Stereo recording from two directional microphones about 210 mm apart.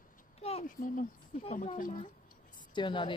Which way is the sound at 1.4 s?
35° left (ahead or behind).